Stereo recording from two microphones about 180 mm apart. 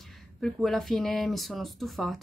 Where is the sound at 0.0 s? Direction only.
Centre (ahead or behind).